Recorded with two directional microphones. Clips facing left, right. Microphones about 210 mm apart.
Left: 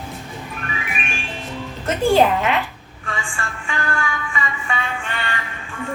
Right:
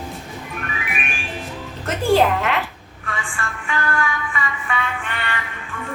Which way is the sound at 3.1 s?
30° left (ahead or behind).